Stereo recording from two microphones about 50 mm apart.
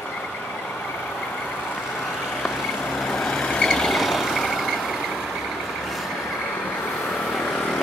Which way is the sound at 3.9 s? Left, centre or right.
Centre.